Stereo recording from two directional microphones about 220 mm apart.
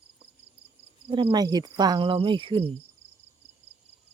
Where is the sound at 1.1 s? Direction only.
20° right (ahead or behind).